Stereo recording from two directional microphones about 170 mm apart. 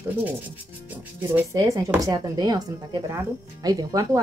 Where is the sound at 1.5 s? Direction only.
20° right (ahead or behind).